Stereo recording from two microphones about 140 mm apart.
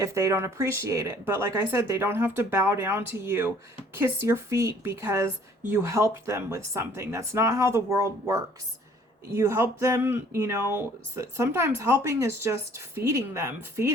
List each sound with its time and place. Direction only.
0.0 s speech: 20° right (ahead or behind)